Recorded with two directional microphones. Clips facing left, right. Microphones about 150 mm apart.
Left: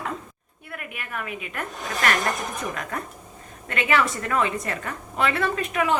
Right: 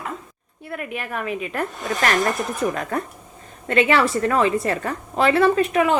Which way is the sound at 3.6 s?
30° right (ahead or behind).